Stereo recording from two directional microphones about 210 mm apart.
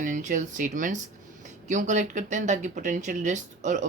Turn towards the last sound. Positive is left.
turn(degrees=-35)  # may be behind; listen again after turning